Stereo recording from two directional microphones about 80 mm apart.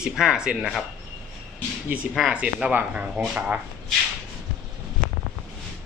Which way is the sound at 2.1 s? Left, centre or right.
Centre.